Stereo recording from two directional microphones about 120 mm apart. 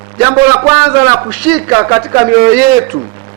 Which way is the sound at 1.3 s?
10° right (ahead or behind).